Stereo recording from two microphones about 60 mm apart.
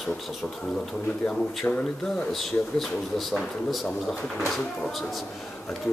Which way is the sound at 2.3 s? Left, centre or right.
Centre.